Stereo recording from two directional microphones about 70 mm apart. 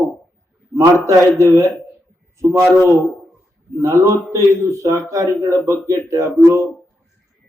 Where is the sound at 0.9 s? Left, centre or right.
Right.